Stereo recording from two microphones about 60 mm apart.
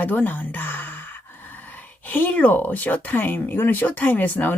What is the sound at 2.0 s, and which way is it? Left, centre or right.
Speech, left.